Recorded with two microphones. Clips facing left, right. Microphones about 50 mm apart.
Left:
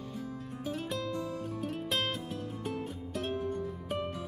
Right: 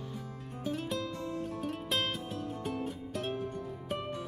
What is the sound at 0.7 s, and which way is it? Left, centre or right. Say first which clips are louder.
Music: right 1 dB; centre.